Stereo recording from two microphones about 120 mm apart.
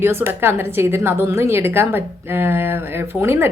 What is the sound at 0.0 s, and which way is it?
A woman's voice, 20° right (ahead or behind).